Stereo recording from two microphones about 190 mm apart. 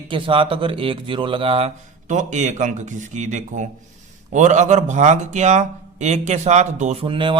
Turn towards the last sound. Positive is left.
turn(degrees=-25)  # may be behind; listen again after turning